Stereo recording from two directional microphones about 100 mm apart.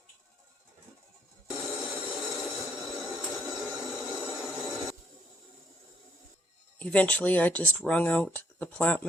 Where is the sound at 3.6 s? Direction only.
Centre (ahead or behind).